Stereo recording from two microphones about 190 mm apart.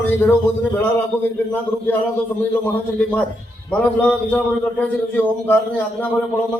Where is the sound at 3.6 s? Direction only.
5° left (ahead or behind).